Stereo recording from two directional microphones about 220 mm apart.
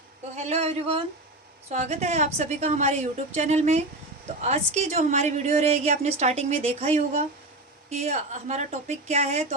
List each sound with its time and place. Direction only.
0.4 s a woman's voice: 30° right (ahead or behind)